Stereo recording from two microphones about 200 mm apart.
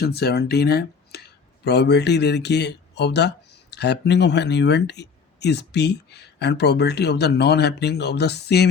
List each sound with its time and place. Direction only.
0.0 s speech: 55° left (ahead or behind)